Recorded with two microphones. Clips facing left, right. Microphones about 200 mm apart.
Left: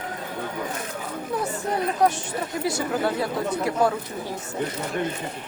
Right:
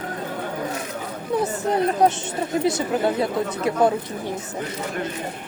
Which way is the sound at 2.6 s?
20° right (ahead or behind).